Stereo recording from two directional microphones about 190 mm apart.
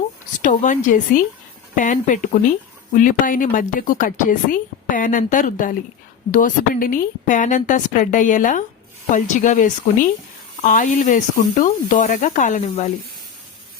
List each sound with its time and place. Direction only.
0.4 s a woman's voice: 40° left (ahead or behind)